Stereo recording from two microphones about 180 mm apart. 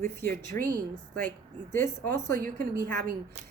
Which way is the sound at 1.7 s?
15° left (ahead or behind).